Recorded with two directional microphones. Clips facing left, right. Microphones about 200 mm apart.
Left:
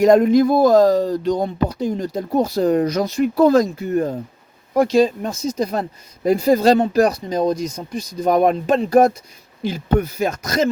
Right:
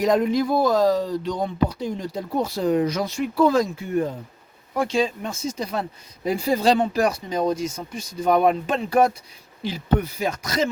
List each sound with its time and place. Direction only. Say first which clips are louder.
0.0 s speech: left 7 dB; 50° left (ahead or behind)